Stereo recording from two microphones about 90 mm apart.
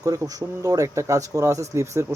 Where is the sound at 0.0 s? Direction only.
45° right (ahead or behind).